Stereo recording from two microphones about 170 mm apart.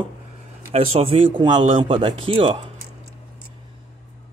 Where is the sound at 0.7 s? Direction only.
35° right (ahead or behind).